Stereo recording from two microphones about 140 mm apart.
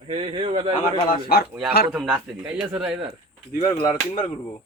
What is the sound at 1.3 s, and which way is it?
Speech, 90° left.